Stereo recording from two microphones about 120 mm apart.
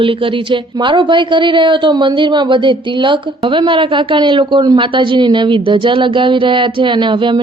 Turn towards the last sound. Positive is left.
turn(degrees=-40)  # may be behind; listen again after turning